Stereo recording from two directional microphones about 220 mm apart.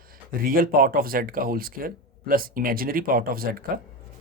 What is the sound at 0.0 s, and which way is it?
Speech, 40° right (ahead or behind).